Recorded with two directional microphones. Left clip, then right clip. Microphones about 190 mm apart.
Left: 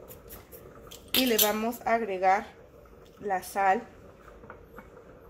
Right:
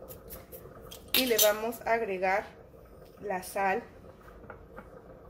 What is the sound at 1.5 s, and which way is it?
Speech, centre (ahead or behind).